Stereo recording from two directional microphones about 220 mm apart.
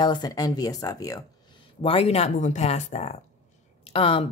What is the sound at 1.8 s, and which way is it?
A woman's voice, 25° left (ahead or behind).